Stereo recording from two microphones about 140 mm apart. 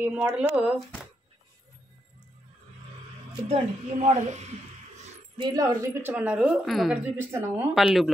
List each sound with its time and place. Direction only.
0.0 s a woman's voice: 15° right (ahead or behind)
3.4 s speech: 50° right (ahead or behind)
5.6 s a woman's voice: 15° right (ahead or behind)
7.7 s a woman's voice: centre (ahead or behind)